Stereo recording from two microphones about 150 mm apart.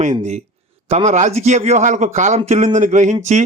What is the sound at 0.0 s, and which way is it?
Speech, 50° right (ahead or behind).